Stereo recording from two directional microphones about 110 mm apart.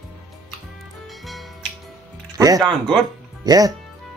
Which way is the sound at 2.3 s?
35° right (ahead or behind).